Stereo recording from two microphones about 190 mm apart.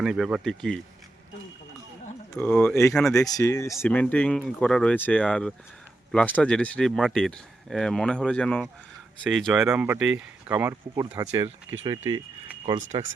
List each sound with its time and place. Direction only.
0.0 s speech: 5° right (ahead or behind)
2.3 s speech: 5° left (ahead or behind)
9.6 s speech: 10° right (ahead or behind)